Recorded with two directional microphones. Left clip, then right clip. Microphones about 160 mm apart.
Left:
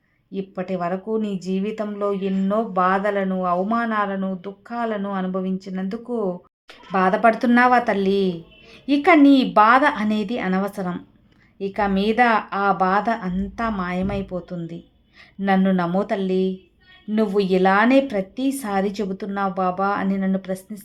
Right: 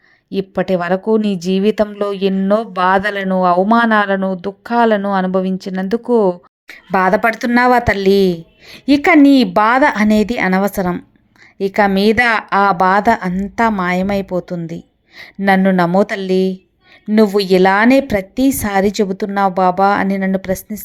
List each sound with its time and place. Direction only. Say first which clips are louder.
0.3 s a woman's voice: right 11 dB; 55° right (ahead or behind); by 20.8 s 40° right (ahead or behind)